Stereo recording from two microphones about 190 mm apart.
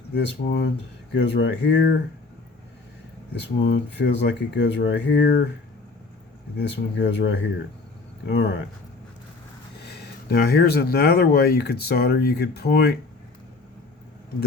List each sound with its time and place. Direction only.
0.1 s speech: 60° left (ahead or behind)
3.4 s speech: 60° left (ahead or behind)
6.6 s speech: 65° left (ahead or behind)
9.8 s speech: 60° left (ahead or behind)